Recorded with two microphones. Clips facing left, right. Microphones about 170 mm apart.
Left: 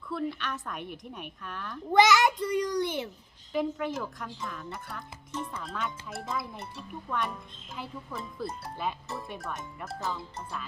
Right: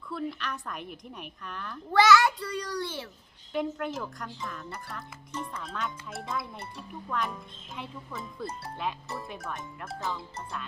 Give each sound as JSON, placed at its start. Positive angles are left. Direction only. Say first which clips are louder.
{"t": 0.1, "sound": "speech", "louder": "left 1 dB", "side_deg": 0}
{"t": 1.9, "sound": "a child's voice", "louder": "even", "side_deg": 20}
{"t": 3.5, "sound": "speech", "louder": "left 1 dB", "side_deg": 0}